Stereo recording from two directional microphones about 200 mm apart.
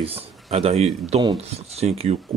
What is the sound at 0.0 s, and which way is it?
Speech, 30° right (ahead or behind).